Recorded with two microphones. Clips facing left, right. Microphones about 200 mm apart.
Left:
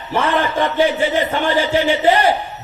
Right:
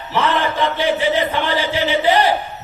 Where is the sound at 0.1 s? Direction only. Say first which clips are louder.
Left 1 dB; 50° left (ahead or behind).